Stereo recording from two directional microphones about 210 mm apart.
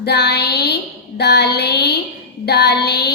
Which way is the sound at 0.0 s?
50° left (ahead or behind).